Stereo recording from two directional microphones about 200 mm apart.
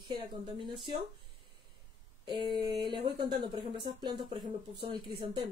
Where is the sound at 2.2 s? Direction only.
20° right (ahead or behind).